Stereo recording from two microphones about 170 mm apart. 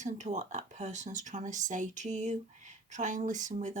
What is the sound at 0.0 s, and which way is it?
Speech, 45° right (ahead or behind).